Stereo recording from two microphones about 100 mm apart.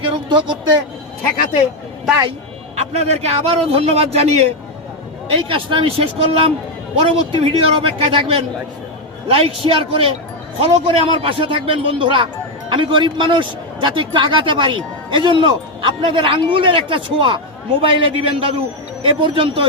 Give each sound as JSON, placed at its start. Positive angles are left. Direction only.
{"t": 0.0, "sound": "a sound", "side_deg": -50}
{"t": 2.7, "sound": "a man's voice", "side_deg": -90}
{"t": 5.3, "sound": "a man's voice", "side_deg": -65}